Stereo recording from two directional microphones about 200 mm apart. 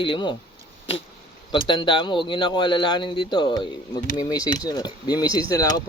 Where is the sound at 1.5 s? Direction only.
25° left (ahead or behind).